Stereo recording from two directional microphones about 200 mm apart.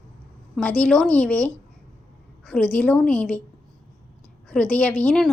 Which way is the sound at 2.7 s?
5° left (ahead or behind).